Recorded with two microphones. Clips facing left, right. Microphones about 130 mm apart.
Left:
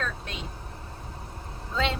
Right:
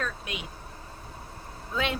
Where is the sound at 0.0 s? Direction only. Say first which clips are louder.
Even; 15° right (ahead or behind).